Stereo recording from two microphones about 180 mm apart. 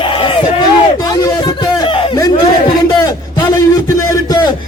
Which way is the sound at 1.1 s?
20° left (ahead or behind).